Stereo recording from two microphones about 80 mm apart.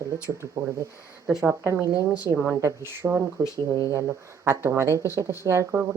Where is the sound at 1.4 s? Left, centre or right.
Right.